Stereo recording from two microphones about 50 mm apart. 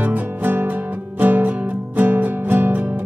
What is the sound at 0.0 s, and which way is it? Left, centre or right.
Music, right.